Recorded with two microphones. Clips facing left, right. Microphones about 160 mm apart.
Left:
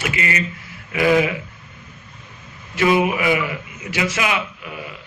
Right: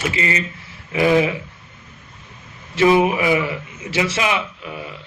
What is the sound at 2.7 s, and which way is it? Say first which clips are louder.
A man's voice: right 3 dB; 30° right (ahead or behind).